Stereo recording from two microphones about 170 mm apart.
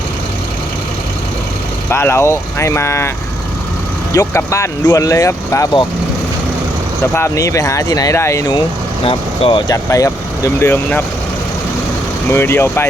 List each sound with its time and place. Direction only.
1.9 s speech: 15° left (ahead or behind)
4.1 s speech: 20° left (ahead or behind)
7.1 s speech: 15° left (ahead or behind)
9.0 s speech: 30° left (ahead or behind)
9.7 s speech: 20° left (ahead or behind)
12.3 s speech: 15° left (ahead or behind)